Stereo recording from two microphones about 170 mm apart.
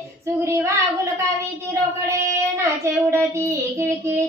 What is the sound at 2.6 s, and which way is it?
Speech, 15° right (ahead or behind).